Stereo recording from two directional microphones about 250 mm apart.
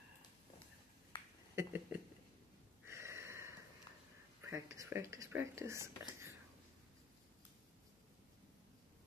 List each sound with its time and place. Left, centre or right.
1.1 s finger snapping: centre
1.5 s a sound: centre
2.9 s wheeze: centre
4.4 s speech: centre